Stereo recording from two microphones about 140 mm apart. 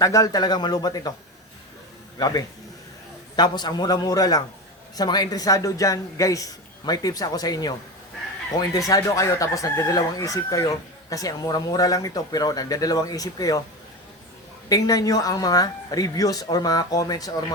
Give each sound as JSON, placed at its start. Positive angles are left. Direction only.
{"t": 0.0, "sound": "speech", "side_deg": 25}
{"t": 2.1, "sound": "a man's voice", "side_deg": 25}
{"t": 14.7, "sound": "speech", "side_deg": 25}